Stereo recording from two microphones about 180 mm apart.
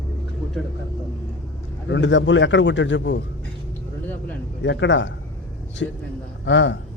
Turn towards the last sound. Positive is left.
turn(degrees=90)